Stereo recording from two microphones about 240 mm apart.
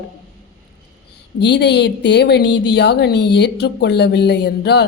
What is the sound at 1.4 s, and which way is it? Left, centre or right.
Speech, left.